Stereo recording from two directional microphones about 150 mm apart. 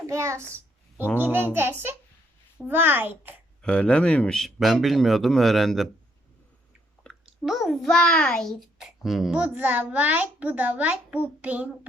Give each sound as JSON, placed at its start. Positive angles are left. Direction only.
{"t": 0.1, "sound": "a child's voice", "side_deg": -20}
{"t": 2.6, "sound": "a child's voice", "side_deg": -15}
{"t": 3.6, "sound": "a child's voice", "side_deg": 5}
{"t": 7.0, "sound": "a child's voice", "side_deg": 0}